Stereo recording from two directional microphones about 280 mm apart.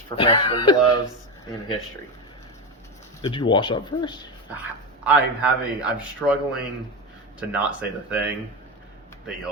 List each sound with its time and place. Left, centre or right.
0.2 s speech: centre
3.2 s speech: centre
5.0 s a man's voice: centre